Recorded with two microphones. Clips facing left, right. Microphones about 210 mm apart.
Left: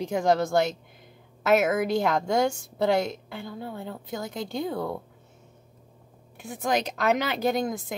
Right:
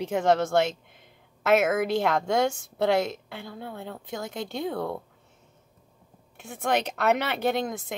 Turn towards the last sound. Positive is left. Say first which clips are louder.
# left 1 dB
turn(degrees=0)  # may be behind; listen again after turning